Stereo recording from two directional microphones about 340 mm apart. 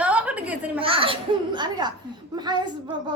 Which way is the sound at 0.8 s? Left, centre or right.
Centre.